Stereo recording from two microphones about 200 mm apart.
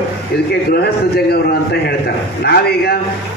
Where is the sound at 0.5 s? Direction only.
50° left (ahead or behind).